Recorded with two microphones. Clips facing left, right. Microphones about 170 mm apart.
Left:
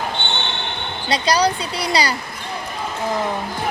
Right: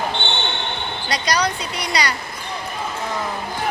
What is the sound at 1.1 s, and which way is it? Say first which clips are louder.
Speech: left 4 dB; 30° left (ahead or behind).